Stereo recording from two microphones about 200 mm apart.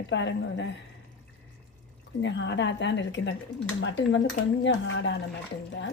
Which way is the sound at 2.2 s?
60° left (ahead or behind).